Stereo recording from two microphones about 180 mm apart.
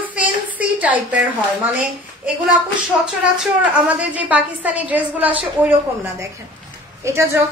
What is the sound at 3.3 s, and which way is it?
A woman's voice, 5° right (ahead or behind).